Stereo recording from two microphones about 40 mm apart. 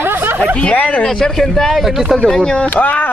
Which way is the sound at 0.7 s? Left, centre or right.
Left.